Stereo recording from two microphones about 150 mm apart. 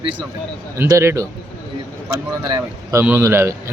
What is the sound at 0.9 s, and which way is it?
Speech, 20° right (ahead or behind).